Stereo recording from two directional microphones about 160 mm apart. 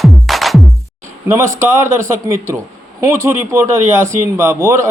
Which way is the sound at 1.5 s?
15° right (ahead or behind).